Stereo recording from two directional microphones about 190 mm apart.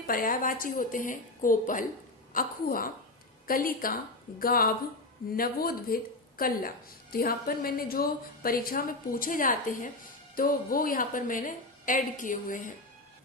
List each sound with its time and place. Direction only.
0.1 s a woman's voice: 45° left (ahead or behind)